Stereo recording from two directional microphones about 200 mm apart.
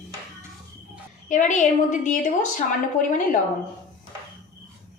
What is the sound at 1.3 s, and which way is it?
Speech, 40° left (ahead or behind).